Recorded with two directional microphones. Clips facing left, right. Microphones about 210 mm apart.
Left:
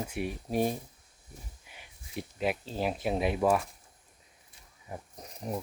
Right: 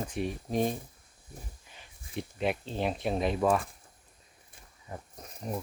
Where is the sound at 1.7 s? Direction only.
15° left (ahead or behind).